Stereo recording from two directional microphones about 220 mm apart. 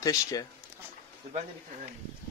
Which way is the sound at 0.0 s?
15° left (ahead or behind).